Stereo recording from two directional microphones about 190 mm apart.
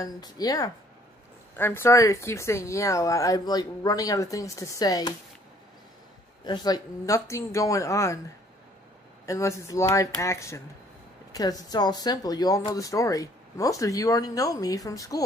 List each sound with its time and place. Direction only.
0.0 s speech: 20° left (ahead or behind)
6.4 s speech: 20° left (ahead or behind)
9.2 s speech: 15° left (ahead or behind)